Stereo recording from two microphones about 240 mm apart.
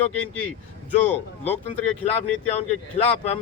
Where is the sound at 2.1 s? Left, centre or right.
Left.